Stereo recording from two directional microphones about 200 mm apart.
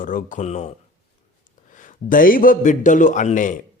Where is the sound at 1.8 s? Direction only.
45° left (ahead or behind).